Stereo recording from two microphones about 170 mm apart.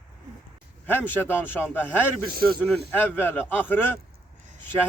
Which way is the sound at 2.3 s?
60° right (ahead or behind).